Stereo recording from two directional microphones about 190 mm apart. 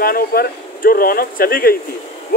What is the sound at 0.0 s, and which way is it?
Speech, 50° left (ahead or behind).